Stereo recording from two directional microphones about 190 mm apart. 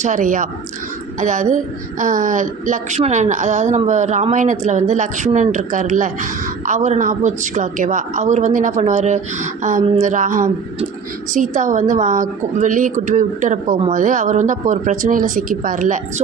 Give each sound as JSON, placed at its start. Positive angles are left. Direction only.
{"t": 0.0, "sound": "a woman's voice", "side_deg": -40}